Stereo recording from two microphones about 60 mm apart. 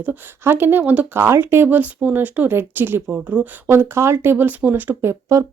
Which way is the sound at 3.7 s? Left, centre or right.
Right.